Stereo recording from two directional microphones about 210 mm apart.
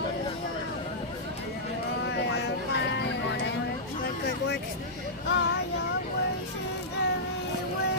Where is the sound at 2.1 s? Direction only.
55° left (ahead or behind).